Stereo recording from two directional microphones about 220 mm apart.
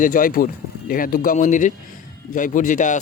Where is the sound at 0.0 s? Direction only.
40° left (ahead or behind).